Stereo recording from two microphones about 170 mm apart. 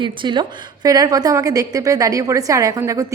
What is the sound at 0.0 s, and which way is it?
A woman's voice, 25° right (ahead or behind).